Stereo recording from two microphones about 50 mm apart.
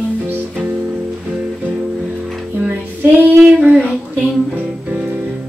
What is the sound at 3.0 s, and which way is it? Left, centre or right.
Child singing, right.